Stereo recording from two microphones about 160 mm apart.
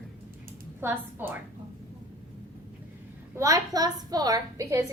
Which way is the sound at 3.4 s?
20° right (ahead or behind).